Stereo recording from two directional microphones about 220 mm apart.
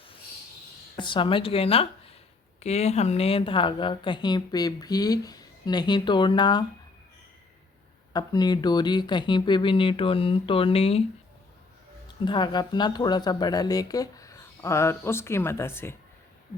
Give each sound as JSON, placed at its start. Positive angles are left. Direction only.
{"t": 0.9, "sound": "a woman's voice", "side_deg": 20}
{"t": 8.1, "sound": "a woman's voice", "side_deg": 20}
{"t": 12.0, "sound": "speech", "side_deg": 20}